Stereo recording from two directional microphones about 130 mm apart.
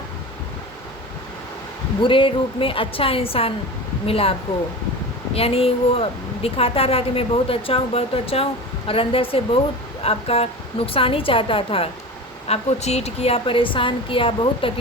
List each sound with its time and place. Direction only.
2.0 s a woman's voice: 40° left (ahead or behind)
12.5 s a woman's voice: 55° left (ahead or behind)